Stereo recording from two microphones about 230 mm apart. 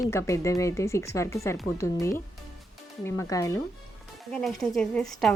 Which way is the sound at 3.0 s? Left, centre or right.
Centre.